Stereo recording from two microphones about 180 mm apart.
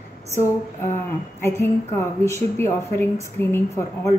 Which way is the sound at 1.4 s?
15° left (ahead or behind).